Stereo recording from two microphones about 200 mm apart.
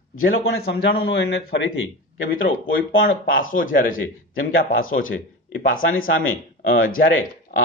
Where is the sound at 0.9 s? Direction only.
60° left (ahead or behind); by 2.4 s 75° left (ahead or behind).